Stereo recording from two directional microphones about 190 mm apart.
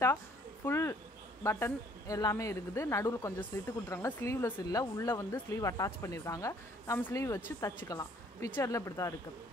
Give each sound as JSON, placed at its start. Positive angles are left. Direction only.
{"t": 0.7, "sound": "speech", "side_deg": 15}